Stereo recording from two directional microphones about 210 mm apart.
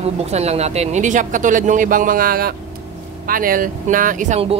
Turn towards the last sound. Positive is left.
turn(degrees=-30)  # may be behind; listen again after turning